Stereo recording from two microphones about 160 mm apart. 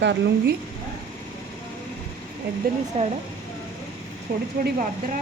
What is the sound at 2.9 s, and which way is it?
Speech, 40° right (ahead or behind).